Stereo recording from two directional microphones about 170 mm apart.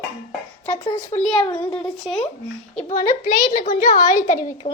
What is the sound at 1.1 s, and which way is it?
Speech, 20° left (ahead or behind).